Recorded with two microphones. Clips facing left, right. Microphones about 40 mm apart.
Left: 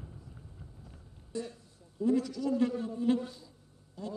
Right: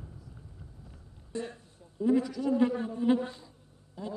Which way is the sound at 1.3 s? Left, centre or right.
Right.